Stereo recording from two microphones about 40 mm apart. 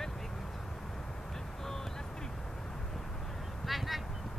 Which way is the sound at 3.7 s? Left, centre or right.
Centre.